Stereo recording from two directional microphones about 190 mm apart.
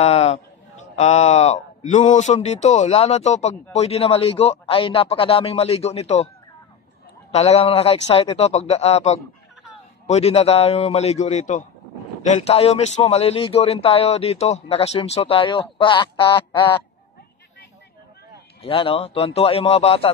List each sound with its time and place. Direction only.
0.0 s a man's voice: 35° left (ahead or behind)
7.3 s a man's voice: 35° left (ahead or behind)
18.6 s a man's voice: 30° left (ahead or behind)